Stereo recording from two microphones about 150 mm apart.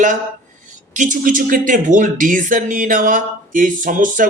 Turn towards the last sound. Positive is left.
turn(degrees=-60)  # may be behind; listen again after turning